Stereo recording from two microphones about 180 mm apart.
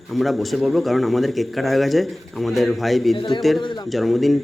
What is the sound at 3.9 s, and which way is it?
Speech, centre (ahead or behind).